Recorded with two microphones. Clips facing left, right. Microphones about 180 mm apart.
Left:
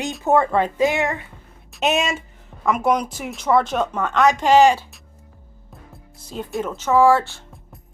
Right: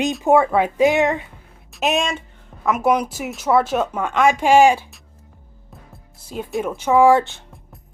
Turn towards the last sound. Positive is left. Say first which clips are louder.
# right 2 dB
turn(degrees=-20)  # may be behind; listen again after turning